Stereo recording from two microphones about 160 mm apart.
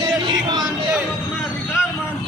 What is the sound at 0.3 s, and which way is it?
Music, 25° right (ahead or behind).